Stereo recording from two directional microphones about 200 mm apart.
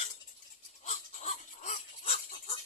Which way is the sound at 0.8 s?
35° left (ahead or behind).